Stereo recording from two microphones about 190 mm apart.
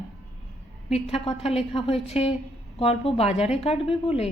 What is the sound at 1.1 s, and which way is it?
A woman's voice, 30° left (ahead or behind).